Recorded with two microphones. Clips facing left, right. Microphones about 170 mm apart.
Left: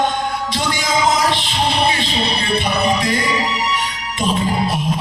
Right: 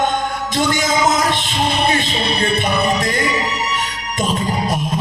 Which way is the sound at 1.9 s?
45° right (ahead or behind).